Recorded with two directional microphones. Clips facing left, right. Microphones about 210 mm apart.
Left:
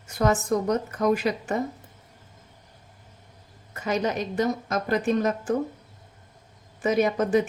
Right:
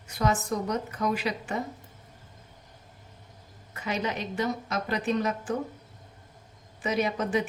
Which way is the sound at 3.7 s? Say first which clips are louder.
Left 5 dB; 45° left (ahead or behind).